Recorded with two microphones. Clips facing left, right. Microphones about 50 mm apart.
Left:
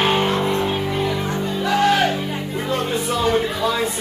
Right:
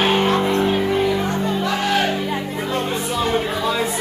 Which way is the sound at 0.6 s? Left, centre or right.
Centre.